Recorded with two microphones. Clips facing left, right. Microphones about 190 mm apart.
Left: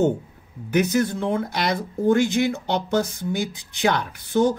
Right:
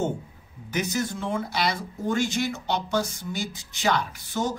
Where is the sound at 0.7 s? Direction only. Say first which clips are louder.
Left 7 dB; 60° left (ahead or behind).